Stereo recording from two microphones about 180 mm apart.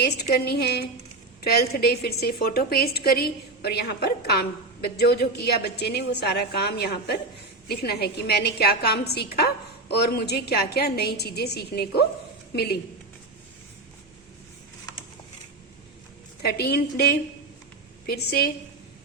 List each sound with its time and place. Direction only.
0.0 s a woman's voice: 65° left (ahead or behind)
16.4 s a woman's voice: 60° left (ahead or behind)